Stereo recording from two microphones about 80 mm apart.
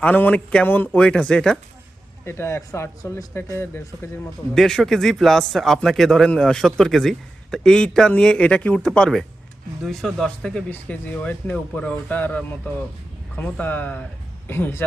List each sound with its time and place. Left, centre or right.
0.0 s speech: centre
2.2 s speech: left
4.5 s speech: centre; by 14.8 s left